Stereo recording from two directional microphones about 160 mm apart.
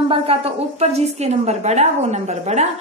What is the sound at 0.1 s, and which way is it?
A woman's voice, 35° right (ahead or behind).